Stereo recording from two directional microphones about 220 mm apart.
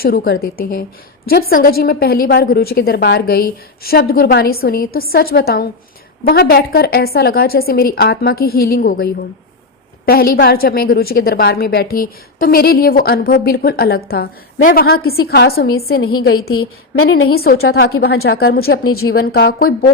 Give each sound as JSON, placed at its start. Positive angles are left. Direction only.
{"t": 0.0, "sound": "a woman's voice", "side_deg": 40}
{"t": 10.1, "sound": "a woman's voice", "side_deg": 45}
{"t": 16.3, "sound": "a woman's voice", "side_deg": 70}
{"t": 17.3, "sound": "a woman's voice", "side_deg": 45}
{"t": 18.8, "sound": "a woman's voice", "side_deg": 75}
{"t": 19.0, "sound": "a woman's voice", "side_deg": 45}